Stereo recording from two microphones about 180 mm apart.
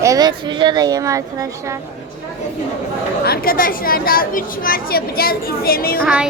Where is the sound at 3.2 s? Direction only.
55° left (ahead or behind).